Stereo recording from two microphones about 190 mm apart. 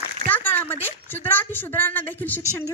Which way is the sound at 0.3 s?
10° left (ahead or behind).